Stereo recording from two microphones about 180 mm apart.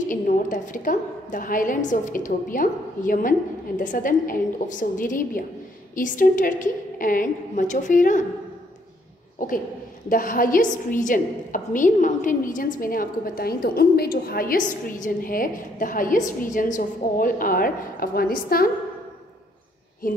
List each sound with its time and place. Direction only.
0.0 s a woman's voice: 45° left (ahead or behind)
9.4 s a woman's voice: 50° left (ahead or behind)